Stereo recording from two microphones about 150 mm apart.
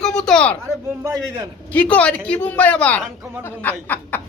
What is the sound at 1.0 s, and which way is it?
Speech, 25° right (ahead or behind).